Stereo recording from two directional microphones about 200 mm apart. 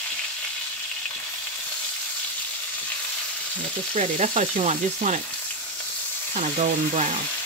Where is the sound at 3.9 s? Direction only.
35° right (ahead or behind).